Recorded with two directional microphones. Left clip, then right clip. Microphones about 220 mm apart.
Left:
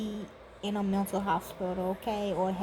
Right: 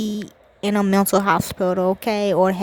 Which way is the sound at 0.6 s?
45° right (ahead or behind).